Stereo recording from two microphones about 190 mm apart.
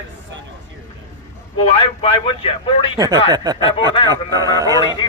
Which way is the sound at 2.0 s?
30° left (ahead or behind).